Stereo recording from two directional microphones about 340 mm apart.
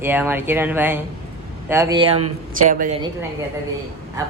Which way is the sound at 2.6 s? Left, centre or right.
Right.